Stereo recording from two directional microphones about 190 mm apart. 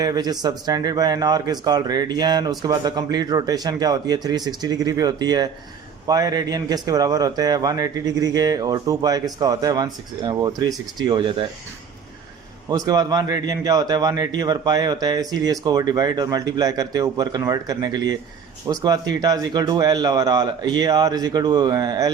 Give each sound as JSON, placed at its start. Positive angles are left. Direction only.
{"t": 0.0, "sound": "speech", "side_deg": -20}
{"t": 12.7, "sound": "speech", "side_deg": -20}